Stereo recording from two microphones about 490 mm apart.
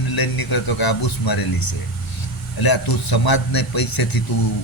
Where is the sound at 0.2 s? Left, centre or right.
Left.